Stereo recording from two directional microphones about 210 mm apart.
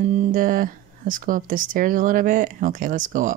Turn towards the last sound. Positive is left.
turn(degrees=-35)  # may be behind; listen again after turning